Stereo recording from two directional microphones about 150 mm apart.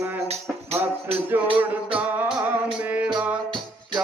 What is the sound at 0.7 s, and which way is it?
Music, 40° right (ahead or behind).